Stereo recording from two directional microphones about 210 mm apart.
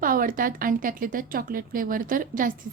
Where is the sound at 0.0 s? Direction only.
40° right (ahead or behind).